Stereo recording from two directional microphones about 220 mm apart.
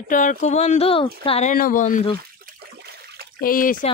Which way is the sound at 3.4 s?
40° left (ahead or behind).